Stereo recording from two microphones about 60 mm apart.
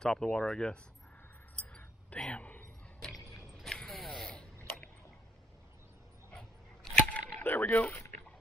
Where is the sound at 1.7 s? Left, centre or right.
Centre.